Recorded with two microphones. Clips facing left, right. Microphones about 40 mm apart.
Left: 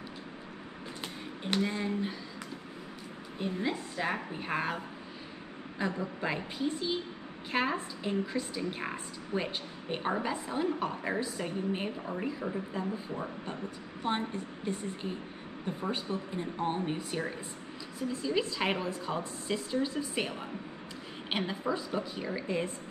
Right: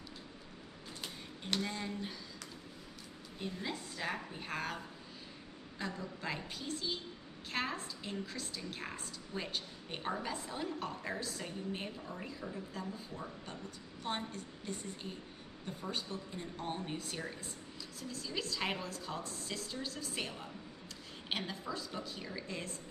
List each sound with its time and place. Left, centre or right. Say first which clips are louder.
1.0 s a sound: left 7 dB; left
3.3 s a woman's voice: left 8 dB; left
14.0 s a woman's voice: left 7 dB; left